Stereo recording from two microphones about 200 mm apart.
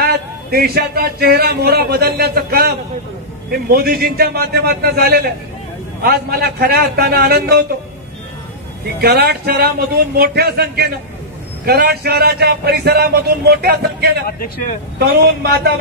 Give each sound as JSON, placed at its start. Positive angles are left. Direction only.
{"t": 0.0, "sound": "a man's voice", "side_deg": -50}
{"t": 3.7, "sound": "a man's voice", "side_deg": -50}
{"t": 9.0, "sound": "a man's voice", "side_deg": -55}